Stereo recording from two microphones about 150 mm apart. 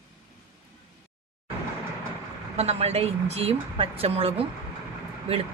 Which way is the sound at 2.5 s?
45° right (ahead or behind).